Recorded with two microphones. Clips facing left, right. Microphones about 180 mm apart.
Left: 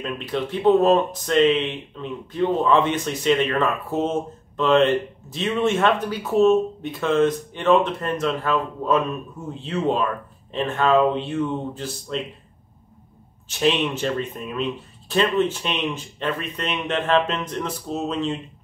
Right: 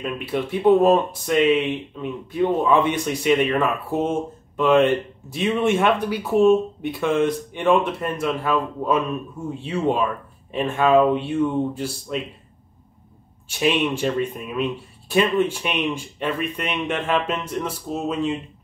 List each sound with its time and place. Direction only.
0.0 s speech: 10° right (ahead or behind)
13.5 s speech: 10° right (ahead or behind)